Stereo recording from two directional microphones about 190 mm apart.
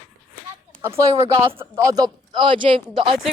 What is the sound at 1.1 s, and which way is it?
Speech, 25° right (ahead or behind).